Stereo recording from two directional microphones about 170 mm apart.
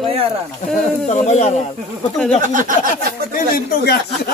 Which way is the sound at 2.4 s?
50° right (ahead or behind).